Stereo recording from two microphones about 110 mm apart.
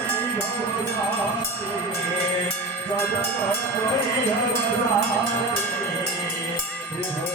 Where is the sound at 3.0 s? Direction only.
20° left (ahead or behind).